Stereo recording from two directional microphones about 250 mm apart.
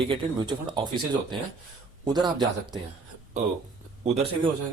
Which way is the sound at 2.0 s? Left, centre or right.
Centre.